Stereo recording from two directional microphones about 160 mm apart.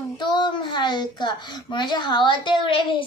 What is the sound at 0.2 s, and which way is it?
A child's voice, 30° left (ahead or behind).